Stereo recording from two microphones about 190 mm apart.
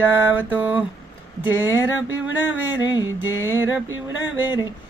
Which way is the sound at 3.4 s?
10° right (ahead or behind).